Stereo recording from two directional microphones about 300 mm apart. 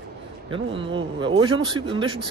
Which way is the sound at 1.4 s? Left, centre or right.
Centre.